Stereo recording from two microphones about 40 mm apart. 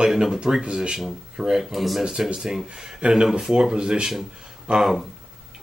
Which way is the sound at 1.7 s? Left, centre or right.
Centre.